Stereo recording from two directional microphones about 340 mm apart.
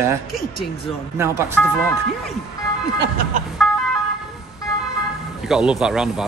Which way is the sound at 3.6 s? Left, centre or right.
Centre.